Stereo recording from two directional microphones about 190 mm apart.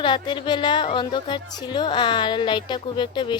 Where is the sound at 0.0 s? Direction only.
25° left (ahead or behind).